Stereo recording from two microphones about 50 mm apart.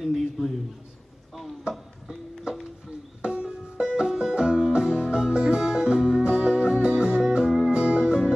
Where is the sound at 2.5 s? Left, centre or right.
Centre.